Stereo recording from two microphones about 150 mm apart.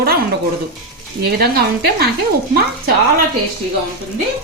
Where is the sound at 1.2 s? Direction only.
90° right.